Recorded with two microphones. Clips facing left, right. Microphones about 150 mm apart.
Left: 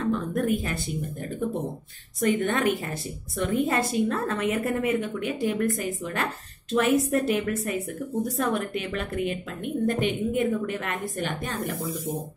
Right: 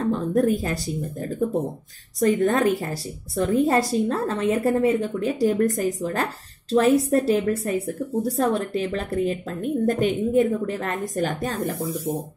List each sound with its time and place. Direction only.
0.0 s speech: 35° right (ahead or behind)